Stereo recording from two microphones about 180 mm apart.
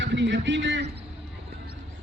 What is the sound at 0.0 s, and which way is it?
Speech, 80° right.